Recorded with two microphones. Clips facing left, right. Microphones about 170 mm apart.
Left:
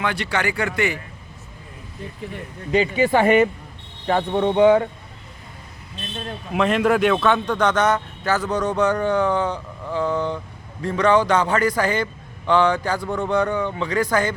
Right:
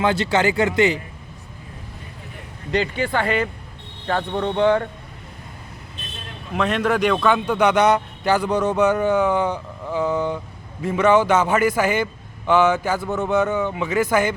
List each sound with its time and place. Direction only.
0.0 s speech: 25° right (ahead or behind)
2.7 s speech: 5° left (ahead or behind)
3.1 s speech: 20° left (ahead or behind)
4.0 s speech: 10° left (ahead or behind)
6.5 s a man's voice: centre (ahead or behind)